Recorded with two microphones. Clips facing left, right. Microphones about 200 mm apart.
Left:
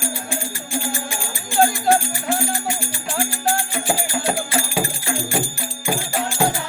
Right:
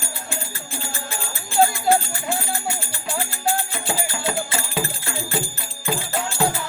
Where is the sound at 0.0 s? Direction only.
15° left (ahead or behind).